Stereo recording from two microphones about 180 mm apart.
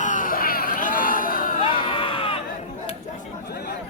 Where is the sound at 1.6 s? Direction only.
30° left (ahead or behind).